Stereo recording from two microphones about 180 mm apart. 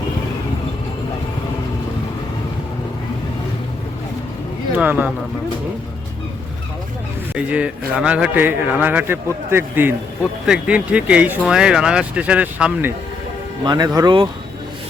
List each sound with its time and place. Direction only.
4.7 s speech: 10° right (ahead or behind)
7.3 s a man's voice: 5° right (ahead or behind)
13.7 s speech: 20° right (ahead or behind)